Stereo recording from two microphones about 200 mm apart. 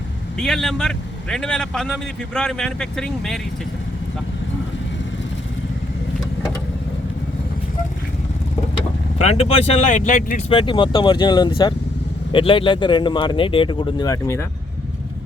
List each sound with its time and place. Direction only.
0.3 s a man's voice: 5° left (ahead or behind)
9.2 s speech: 30° left (ahead or behind)
10.5 s speech: 25° left (ahead or behind)